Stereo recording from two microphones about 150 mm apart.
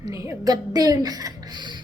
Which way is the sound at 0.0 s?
20° right (ahead or behind).